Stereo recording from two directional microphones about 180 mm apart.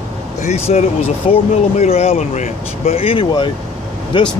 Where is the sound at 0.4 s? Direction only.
35° left (ahead or behind).